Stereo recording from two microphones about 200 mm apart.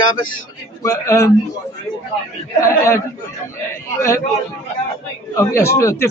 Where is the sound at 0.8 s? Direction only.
15° left (ahead or behind).